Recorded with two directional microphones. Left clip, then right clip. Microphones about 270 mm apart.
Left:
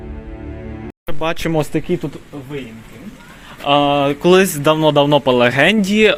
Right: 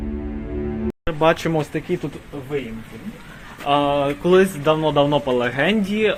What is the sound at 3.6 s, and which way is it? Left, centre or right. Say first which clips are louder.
Speech: left 5 dB; left.